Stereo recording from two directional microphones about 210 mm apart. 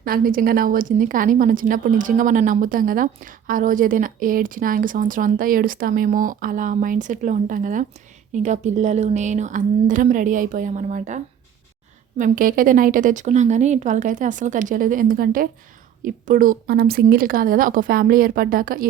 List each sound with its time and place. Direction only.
0.0 s a woman's voice: 45° right (ahead or behind)